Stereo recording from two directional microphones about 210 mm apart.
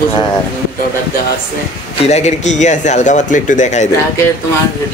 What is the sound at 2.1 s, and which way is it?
Speech, 35° left (ahead or behind).